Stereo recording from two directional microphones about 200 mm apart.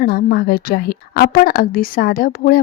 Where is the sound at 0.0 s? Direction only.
50° left (ahead or behind).